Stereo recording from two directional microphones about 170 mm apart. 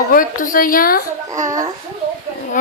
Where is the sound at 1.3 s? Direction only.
20° right (ahead or behind).